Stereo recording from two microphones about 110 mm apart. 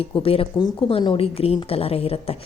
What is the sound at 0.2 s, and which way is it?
Speech, 60° left (ahead or behind).